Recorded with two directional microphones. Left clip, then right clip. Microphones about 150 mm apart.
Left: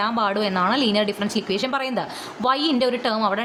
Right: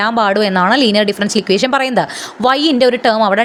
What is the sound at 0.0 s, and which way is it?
Speech, 45° right (ahead or behind).